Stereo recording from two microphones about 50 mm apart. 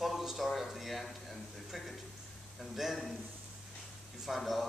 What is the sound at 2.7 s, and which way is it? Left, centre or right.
Speech, centre.